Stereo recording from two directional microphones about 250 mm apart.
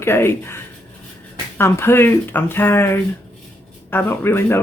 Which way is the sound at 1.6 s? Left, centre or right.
Centre.